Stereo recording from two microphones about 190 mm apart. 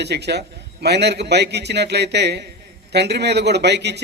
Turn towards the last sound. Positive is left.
turn(degrees=-60)  # may be behind; listen again after turning